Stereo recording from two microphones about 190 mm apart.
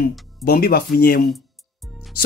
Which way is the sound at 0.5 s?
55° left (ahead or behind).